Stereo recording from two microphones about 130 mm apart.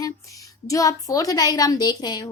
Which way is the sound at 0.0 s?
25° left (ahead or behind).